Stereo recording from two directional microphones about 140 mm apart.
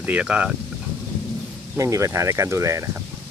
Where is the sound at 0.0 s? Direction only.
10° right (ahead or behind).